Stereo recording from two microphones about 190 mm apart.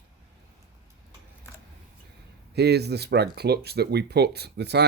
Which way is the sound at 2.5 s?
60° right (ahead or behind).